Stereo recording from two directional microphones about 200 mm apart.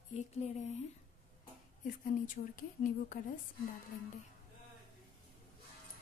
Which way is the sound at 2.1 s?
40° left (ahead or behind).